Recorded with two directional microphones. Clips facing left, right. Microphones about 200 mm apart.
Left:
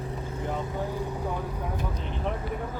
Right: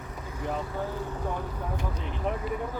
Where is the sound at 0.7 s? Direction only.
15° left (ahead or behind).